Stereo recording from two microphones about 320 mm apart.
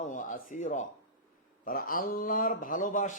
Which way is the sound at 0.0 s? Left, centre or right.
Left.